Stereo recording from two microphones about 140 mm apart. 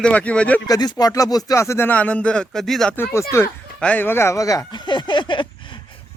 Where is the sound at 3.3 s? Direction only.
20° left (ahead or behind); by 5.8 s 35° left (ahead or behind).